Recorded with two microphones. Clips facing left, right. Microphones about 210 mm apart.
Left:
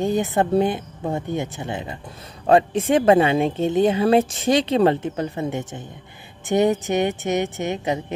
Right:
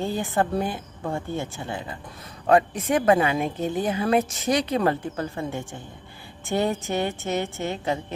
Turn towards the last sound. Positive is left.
turn(degrees=20)  # may be behind; listen again after turning